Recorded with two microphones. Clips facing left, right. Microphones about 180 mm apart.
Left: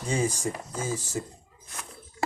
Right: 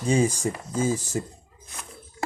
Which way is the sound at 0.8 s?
20° right (ahead or behind).